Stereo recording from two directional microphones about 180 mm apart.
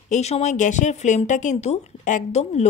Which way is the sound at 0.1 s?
40° left (ahead or behind).